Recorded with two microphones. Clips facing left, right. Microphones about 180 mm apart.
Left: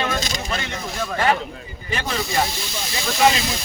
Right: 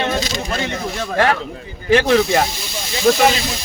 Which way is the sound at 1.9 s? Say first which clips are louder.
Right 10 dB; 85° right.